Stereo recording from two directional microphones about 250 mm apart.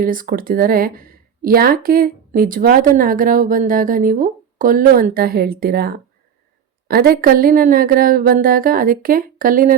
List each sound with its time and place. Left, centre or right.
0.0 s speech: right